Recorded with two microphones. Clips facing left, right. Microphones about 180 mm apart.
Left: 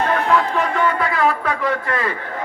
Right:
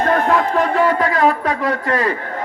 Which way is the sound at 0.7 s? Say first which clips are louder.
Right 4 dB; 35° right (ahead or behind).